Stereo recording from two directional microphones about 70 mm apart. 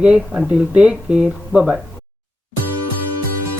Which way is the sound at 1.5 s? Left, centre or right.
Centre.